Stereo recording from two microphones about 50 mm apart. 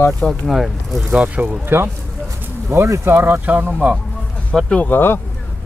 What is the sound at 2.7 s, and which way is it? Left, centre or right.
Speech, right.